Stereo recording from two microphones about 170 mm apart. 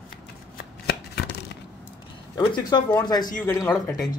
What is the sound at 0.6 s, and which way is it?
Shuffling cards, 65° left (ahead or behind).